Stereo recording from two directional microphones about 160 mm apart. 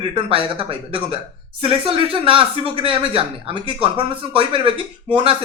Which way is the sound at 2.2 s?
35° right (ahead or behind).